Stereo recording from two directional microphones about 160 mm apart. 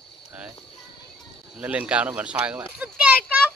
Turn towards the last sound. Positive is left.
turn(degrees=-10)  # may be behind; listen again after turning